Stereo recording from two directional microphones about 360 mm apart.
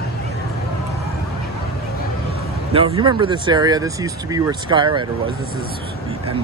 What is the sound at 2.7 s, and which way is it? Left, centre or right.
Speech, centre.